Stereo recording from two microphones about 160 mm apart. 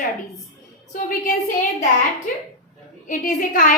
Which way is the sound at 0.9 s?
50° left (ahead or behind).